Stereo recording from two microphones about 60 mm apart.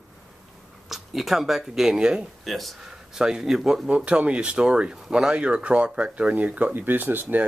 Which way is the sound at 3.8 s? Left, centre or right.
Right.